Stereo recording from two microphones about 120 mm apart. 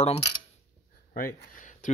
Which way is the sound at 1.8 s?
90° left.